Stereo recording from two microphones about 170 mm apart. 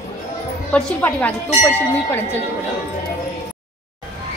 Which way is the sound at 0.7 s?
10° left (ahead or behind).